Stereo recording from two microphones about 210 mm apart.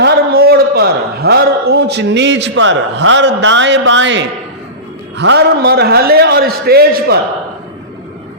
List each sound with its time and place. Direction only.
0.0 s a man's voice: 45° right (ahead or behind)